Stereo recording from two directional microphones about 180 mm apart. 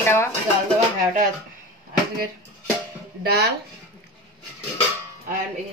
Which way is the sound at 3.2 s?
60° right (ahead or behind).